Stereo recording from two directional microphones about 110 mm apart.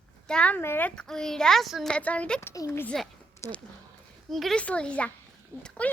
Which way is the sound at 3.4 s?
25° left (ahead or behind).